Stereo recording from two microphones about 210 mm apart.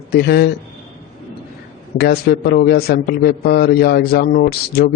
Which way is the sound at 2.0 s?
50° left (ahead or behind).